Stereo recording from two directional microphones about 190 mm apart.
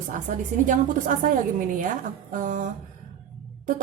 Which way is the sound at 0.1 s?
45° right (ahead or behind).